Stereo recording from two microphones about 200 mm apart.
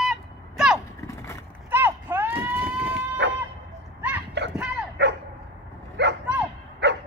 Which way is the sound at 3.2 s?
60° right (ahead or behind).